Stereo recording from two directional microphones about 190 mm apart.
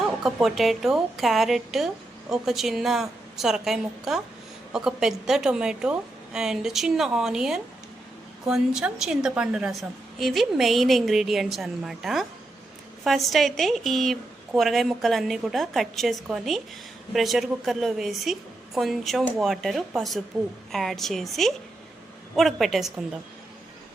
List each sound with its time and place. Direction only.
0.2 s a woman's voice: centre (ahead or behind)